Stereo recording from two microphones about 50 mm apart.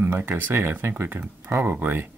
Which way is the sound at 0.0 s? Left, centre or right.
Right.